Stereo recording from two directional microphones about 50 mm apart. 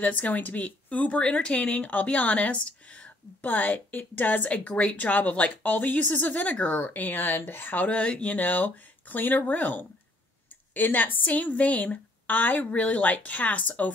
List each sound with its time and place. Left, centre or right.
0.0 s a woman's voice: left